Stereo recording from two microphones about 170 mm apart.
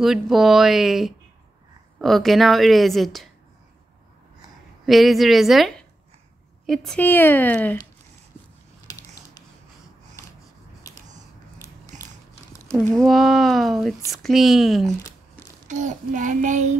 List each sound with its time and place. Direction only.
0.0 s a woman's voice: centre (ahead or behind)
4.8 s a woman's voice: centre (ahead or behind)
8.9 s a sound: 20° left (ahead or behind)
10.8 s a sound: 20° left (ahead or behind)
11.9 s biting: 45° right (ahead or behind)
13.0 s a woman's voice: centre (ahead or behind)
15.7 s child singing: 45° right (ahead or behind)